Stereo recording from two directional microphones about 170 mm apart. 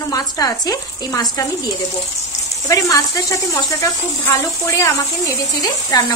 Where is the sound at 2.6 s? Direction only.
20° left (ahead or behind).